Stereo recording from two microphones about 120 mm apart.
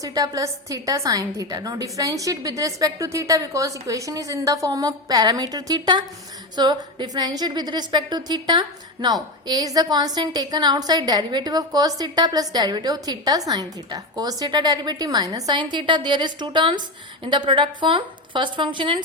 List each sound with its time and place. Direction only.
0.0 s a woman's voice: 30° right (ahead or behind)